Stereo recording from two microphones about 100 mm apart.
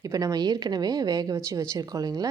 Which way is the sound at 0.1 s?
40° right (ahead or behind).